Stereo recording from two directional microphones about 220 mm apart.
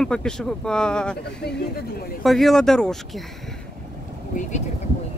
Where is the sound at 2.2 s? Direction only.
Centre (ahead or behind).